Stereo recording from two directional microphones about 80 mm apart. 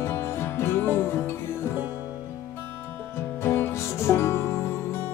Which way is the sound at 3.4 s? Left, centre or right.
Left.